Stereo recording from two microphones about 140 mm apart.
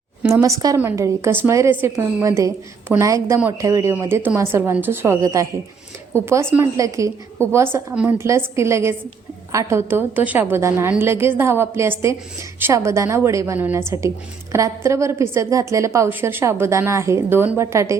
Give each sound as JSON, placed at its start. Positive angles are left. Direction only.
{"t": 0.3, "sound": "a woman's voice", "side_deg": -20}